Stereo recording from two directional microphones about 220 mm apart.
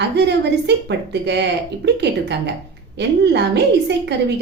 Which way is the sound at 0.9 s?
50° right (ahead or behind).